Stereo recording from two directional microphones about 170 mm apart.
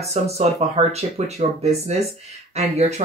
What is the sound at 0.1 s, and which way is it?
Speech, 40° right (ahead or behind).